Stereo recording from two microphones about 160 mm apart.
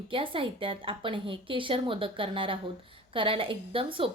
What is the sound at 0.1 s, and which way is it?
A woman's voice, 35° right (ahead or behind).